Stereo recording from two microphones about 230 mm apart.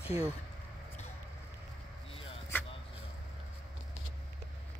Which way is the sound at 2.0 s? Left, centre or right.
Left.